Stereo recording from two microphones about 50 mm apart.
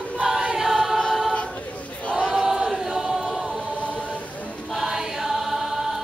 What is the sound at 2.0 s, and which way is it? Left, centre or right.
Choir, centre.